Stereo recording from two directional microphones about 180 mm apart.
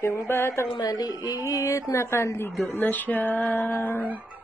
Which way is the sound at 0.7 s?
20° left (ahead or behind).